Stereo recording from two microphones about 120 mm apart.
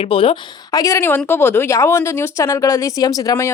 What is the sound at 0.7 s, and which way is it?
Speech, 30° left (ahead or behind).